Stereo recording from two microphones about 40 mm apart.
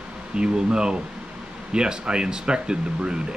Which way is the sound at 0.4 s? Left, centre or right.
Right.